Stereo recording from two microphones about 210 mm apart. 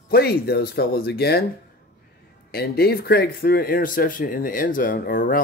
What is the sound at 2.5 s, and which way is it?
Speech, 50° left (ahead or behind).